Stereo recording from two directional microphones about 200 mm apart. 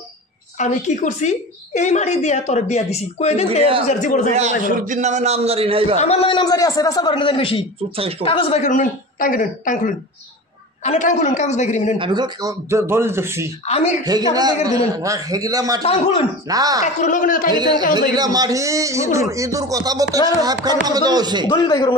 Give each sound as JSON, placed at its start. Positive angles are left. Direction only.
{"t": 0.6, "sound": "a woman's voice", "side_deg": 35}
{"t": 4.3, "sound": "a man's voice", "side_deg": -35}
{"t": 5.9, "sound": "a man's voice", "side_deg": 30}
{"t": 12.0, "sound": "a man's voice", "side_deg": -20}
{"t": 13.7, "sound": "a woman's voice", "side_deg": 35}
{"t": 14.0, "sound": "a man's voice", "side_deg": -20}
{"t": 15.8, "sound": "a woman's voice", "side_deg": 30}
{"t": 16.4, "sound": "a man's voice", "side_deg": -20}
{"t": 16.8, "sound": "a woman's voice", "side_deg": 40}
{"t": 17.5, "sound": "a man's voice", "side_deg": -20}
{"t": 21.5, "sound": "a man's voice", "side_deg": 20}